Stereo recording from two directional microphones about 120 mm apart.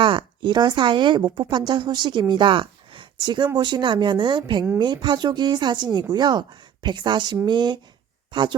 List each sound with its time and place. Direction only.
0.0 s a woman's voice: 45° right (ahead or behind)